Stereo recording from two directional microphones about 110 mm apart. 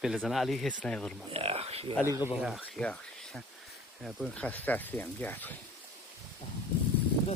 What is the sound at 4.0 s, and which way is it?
Speech, 5° right (ahead or behind).